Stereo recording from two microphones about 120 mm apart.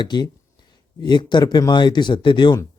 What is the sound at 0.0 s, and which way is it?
A man's voice, 40° left (ahead or behind).